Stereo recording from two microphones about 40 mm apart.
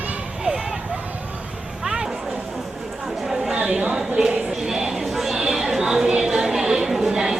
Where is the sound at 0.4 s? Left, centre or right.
Centre.